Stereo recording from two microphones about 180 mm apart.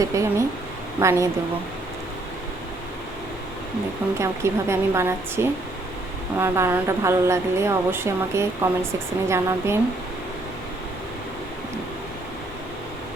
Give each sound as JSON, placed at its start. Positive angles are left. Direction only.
{"t": 0.0, "sound": "speech", "side_deg": -15}
{"t": 4.2, "sound": "speech", "side_deg": -15}